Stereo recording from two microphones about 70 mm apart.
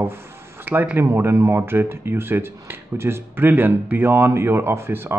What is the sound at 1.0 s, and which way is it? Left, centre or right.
Speech, right.